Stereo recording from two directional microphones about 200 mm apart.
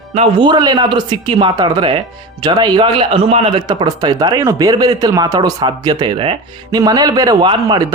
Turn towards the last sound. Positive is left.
turn(degrees=-25)  # may be behind; listen again after turning